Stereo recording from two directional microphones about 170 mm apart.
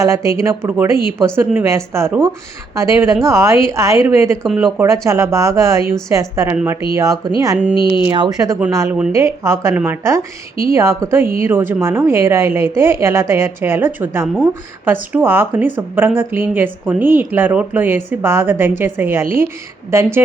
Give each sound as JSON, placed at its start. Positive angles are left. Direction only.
{"t": 0.0, "sound": "a woman's voice", "side_deg": -15}